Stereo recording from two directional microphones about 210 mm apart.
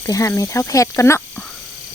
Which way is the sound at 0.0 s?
15° left (ahead or behind).